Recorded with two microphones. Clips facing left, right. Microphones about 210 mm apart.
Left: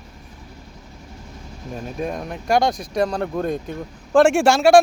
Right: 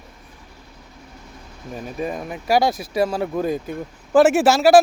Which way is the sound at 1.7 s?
Centre (ahead or behind).